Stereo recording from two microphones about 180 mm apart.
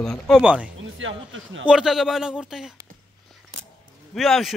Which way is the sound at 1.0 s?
90° right.